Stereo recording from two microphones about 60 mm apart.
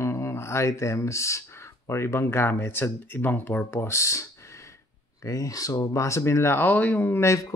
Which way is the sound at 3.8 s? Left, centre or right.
Left.